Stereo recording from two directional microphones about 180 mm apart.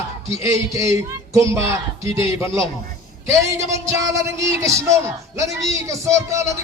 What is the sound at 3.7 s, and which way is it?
Speech, 15° right (ahead or behind).